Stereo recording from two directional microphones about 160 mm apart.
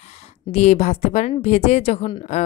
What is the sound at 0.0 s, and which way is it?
A woman's voice, 40° left (ahead or behind).